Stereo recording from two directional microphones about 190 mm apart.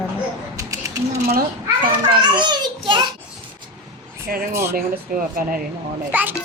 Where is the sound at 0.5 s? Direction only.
15° right (ahead or behind).